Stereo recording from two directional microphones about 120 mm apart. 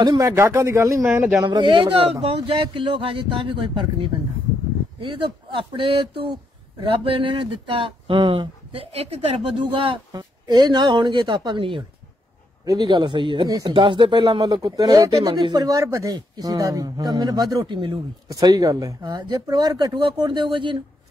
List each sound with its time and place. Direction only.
0.0 s speech: 35° right (ahead or behind)
0.3 s speech: 25° right (ahead or behind)
1.0 s speech: 5° right (ahead or behind)
1.4 s speech: 40° right (ahead or behind); by 9.1 s 55° right (ahead or behind)
9.8 s speech: 40° right (ahead or behind)